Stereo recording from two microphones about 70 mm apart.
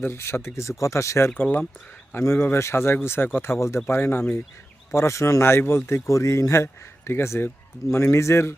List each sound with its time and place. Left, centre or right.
0.0 s speech: left
1.3 s speech: left
2.1 s speech: left